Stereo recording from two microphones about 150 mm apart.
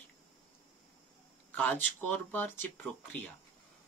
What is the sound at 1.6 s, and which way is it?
Speech, 10° left (ahead or behind).